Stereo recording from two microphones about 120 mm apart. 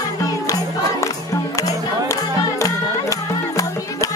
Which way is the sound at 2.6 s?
30° left (ahead or behind).